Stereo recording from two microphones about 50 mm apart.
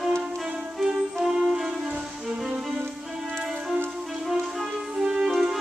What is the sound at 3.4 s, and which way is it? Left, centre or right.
Music, centre.